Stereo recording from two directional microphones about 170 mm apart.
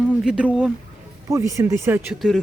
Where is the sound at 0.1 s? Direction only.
5° right (ahead or behind).